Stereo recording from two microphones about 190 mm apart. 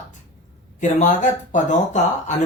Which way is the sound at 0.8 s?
40° left (ahead or behind).